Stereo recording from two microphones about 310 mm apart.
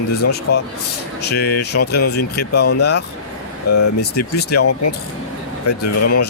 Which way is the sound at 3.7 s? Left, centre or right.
Left.